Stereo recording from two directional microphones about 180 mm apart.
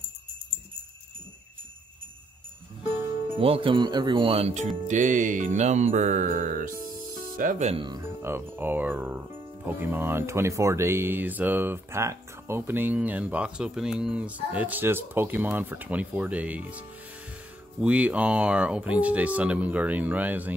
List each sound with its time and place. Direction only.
3.3 s speech: 30° right (ahead or behind)
4.8 s music: 45° right (ahead or behind)
7.7 s speech: 25° right (ahead or behind)
8.0 s speech: 15° right (ahead or behind)